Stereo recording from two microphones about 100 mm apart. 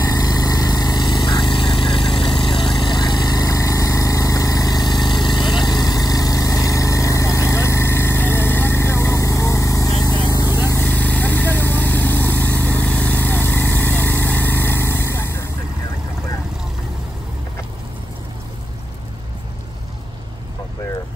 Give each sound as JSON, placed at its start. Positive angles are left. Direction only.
{"t": 0.1, "sound": "vehicle", "side_deg": 35}
{"t": 10.5, "sound": "vehicle", "side_deg": -20}
{"t": 10.8, "sound": "vehicle", "side_deg": 15}